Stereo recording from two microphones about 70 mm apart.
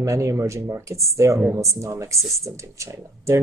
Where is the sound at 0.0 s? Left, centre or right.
Right.